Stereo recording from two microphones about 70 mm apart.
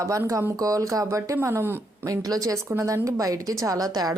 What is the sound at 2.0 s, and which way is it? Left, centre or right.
A woman's voice, right.